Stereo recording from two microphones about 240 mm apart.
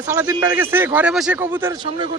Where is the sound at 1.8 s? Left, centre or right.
Right.